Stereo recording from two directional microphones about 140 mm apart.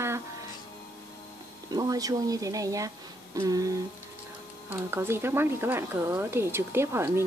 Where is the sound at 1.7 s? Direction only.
25° right (ahead or behind).